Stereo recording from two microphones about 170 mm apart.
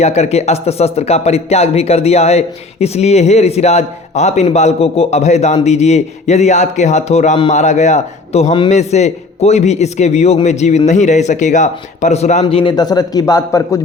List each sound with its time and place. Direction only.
0.0 s a man's voice: 40° left (ahead or behind); by 13.8 s 20° left (ahead or behind)